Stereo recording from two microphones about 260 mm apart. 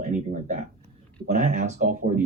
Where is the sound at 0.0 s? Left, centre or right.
Right.